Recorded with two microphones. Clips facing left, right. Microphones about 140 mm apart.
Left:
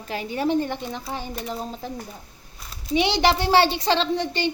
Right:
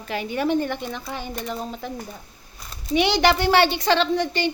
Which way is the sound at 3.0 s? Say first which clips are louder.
Right 1 dB; 25° left (ahead or behind).